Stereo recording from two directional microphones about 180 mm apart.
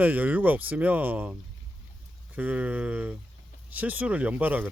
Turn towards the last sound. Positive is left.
turn(degrees=-10)  # may be behind; listen again after turning